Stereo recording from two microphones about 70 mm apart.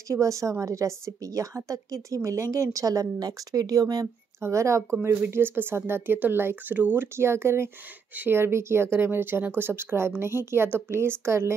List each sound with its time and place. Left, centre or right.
0.1 s a woman's voice: right
4.4 s a woman's voice: right
5.3 s a woman's voice: right